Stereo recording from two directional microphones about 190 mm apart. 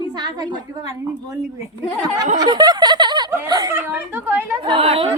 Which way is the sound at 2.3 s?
20° right (ahead or behind).